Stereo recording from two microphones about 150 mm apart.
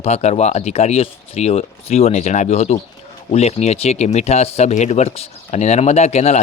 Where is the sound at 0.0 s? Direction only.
45° left (ahead or behind).